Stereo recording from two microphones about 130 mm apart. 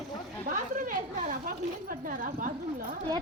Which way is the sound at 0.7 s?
90° right.